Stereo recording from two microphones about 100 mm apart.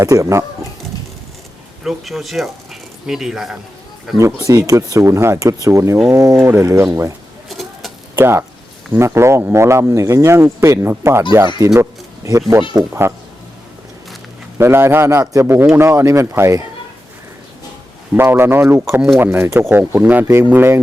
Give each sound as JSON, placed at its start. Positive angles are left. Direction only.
{"t": 0.0, "sound": "speech", "side_deg": -30}
{"t": 1.8, "sound": "speech", "side_deg": 0}
{"t": 4.4, "sound": "speech", "side_deg": -35}
{"t": 6.4, "sound": "speech", "side_deg": -25}
{"t": 7.5, "sound": "a sound", "side_deg": 0}
{"t": 8.1, "sound": "speech", "side_deg": -25}
{"t": 11.8, "sound": "a sound", "side_deg": -30}
{"t": 12.7, "sound": "speech", "side_deg": -25}
{"t": 14.6, "sound": "speech", "side_deg": -25}
{"t": 18.1, "sound": "speech", "side_deg": -25}